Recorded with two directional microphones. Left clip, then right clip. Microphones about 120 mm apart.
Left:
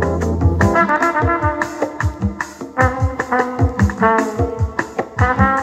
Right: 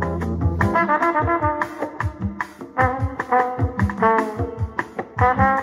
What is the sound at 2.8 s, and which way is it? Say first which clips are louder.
Music: left 3 dB; 40° right (ahead or behind).